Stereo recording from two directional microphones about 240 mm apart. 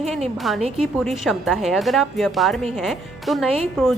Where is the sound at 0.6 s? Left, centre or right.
Right.